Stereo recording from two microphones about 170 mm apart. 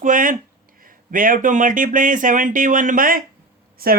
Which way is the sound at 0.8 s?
55° right (ahead or behind).